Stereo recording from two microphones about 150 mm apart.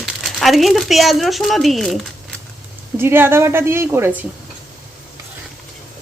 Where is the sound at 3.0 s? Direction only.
15° right (ahead or behind).